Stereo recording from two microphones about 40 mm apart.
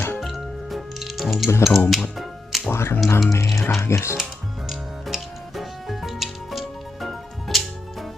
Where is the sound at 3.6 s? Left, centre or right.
Left.